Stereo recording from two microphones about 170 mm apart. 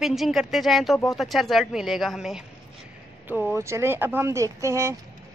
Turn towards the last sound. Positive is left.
turn(degrees=-15)  # may be behind; listen again after turning